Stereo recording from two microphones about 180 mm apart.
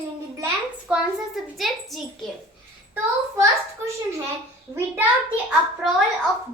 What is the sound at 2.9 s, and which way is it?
A child's voice, 15° right (ahead or behind).